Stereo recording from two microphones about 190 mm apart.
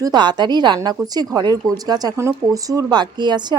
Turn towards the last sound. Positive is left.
turn(degrees=-20)  # may be behind; listen again after turning